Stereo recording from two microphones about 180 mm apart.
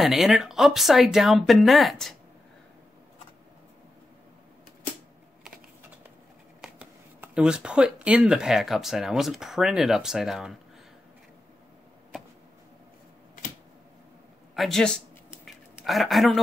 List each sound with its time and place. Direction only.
0.0 s speech: centre (ahead or behind)
6.6 s speech: 5° right (ahead or behind)
14.5 s a man's voice: centre (ahead or behind)
15.4 s a sound: centre (ahead or behind)